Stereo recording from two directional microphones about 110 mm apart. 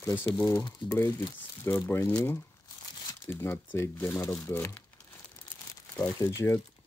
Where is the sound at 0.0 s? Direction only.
15° left (ahead or behind).